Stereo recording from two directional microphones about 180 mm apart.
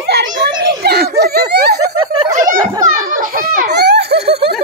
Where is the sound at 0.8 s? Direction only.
60° right (ahead or behind).